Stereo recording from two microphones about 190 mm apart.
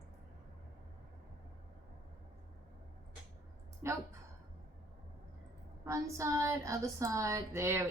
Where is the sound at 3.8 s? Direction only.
15° right (ahead or behind).